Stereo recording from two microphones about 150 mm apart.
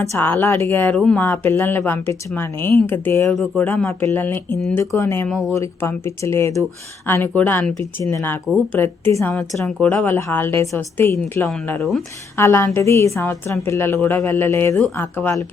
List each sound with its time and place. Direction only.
0.1 s speech: 15° left (ahead or behind)
3.2 s speech: centre (ahead or behind)
3.6 s speech: 10° left (ahead or behind)
11.4 s speech: 5° left (ahead or behind)
12.4 s speech: 15° left (ahead or behind)